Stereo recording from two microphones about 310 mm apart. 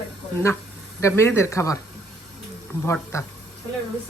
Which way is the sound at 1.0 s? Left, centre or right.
Centre.